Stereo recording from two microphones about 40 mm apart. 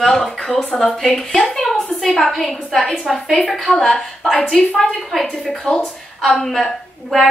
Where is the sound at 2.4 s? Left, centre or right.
Centre.